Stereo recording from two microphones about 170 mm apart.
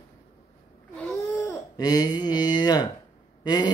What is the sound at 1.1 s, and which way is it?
Babbling, 20° left (ahead or behind).